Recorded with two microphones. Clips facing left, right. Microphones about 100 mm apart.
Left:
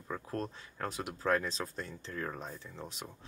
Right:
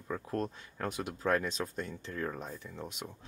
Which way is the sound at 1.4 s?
35° left (ahead or behind).